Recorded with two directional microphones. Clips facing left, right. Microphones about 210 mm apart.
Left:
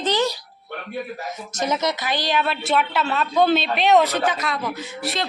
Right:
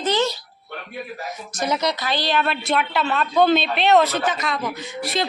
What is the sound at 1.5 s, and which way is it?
Speech, 20° left (ahead or behind).